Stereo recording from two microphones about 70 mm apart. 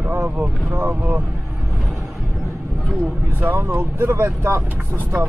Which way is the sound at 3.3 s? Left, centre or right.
Right.